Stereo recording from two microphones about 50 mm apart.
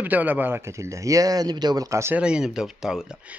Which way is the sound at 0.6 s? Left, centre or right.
Right.